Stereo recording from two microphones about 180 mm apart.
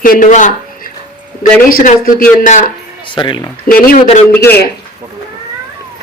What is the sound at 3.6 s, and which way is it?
Speech, 55° left (ahead or behind).